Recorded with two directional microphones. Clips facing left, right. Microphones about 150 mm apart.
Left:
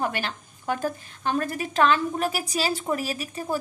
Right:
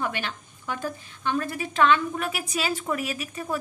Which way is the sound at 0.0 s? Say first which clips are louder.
Left 2 dB; 40° left (ahead or behind).